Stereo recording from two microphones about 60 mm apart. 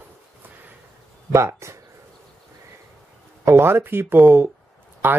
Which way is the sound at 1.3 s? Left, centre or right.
Right.